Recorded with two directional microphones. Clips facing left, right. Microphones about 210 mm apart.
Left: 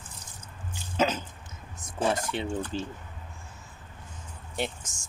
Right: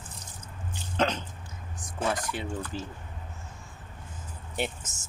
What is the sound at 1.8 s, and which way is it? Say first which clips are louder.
Speech: left 3 dB; 30° left (ahead or behind).